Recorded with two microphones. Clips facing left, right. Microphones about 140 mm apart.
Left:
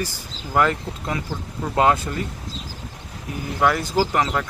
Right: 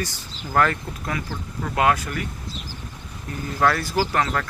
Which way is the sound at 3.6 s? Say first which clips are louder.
Left 1 dB; 15° left (ahead or behind).